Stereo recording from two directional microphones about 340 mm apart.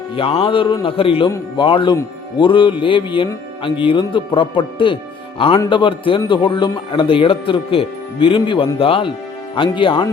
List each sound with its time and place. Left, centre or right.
0.2 s a man's voice: centre